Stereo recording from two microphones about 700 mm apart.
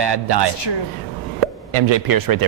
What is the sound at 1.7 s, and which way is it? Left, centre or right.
Speech, right.